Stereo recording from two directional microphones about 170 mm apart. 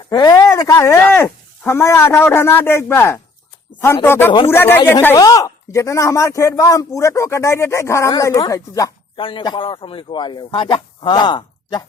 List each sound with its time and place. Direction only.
0.1 s speech: 20° left (ahead or behind)